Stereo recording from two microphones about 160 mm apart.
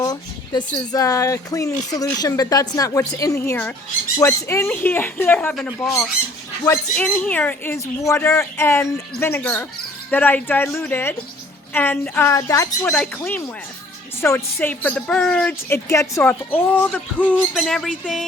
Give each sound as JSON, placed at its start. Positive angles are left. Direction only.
{"t": 0.0, "sound": "a woman's voice", "side_deg": 25}
{"t": 6.9, "sound": "a woman's voice", "side_deg": 5}